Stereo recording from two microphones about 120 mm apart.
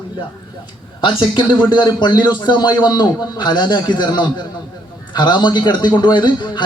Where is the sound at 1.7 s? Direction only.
40° left (ahead or behind).